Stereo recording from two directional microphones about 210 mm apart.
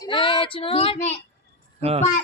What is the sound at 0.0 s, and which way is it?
Speech, 25° left (ahead or behind).